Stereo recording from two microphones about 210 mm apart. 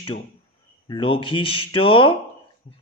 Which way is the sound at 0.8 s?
25° left (ahead or behind).